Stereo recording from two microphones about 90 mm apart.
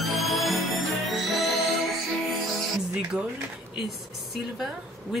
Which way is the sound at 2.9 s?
10° right (ahead or behind).